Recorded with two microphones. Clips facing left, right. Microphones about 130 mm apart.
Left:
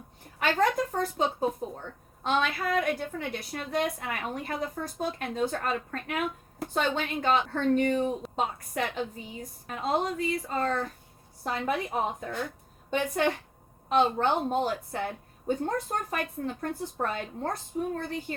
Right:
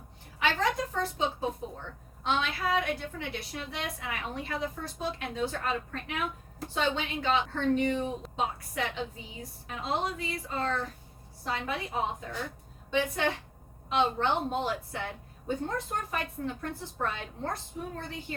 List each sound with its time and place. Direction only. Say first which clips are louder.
0.3 s a woman's voice: left 3 dB; 50° left (ahead or behind)
9.6 s a woman's voice: left 4 dB; 50° left (ahead or behind)